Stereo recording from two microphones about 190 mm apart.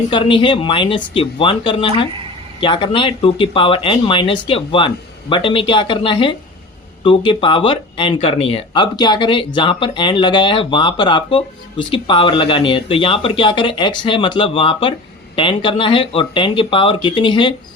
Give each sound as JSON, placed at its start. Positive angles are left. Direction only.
{"t": 0.1, "sound": "speech", "side_deg": 25}